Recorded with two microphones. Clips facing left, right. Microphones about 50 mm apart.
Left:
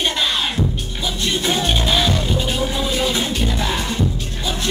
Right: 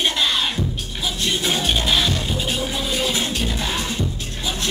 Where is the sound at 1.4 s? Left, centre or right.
Centre.